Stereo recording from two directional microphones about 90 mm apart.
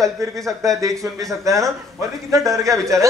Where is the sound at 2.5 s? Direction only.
35° right (ahead or behind).